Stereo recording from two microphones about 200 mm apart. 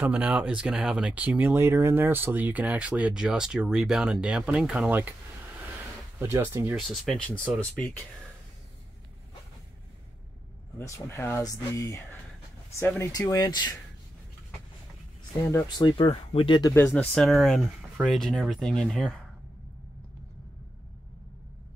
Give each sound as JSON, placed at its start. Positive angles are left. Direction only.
{"t": 0.0, "sound": "speech", "side_deg": -5}
{"t": 6.1, "sound": "speech", "side_deg": -10}
{"t": 6.9, "sound": "speech", "side_deg": 5}
{"t": 10.8, "sound": "speech", "side_deg": 15}
{"t": 15.8, "sound": "speech", "side_deg": 25}
{"t": 16.7, "sound": "speech", "side_deg": 10}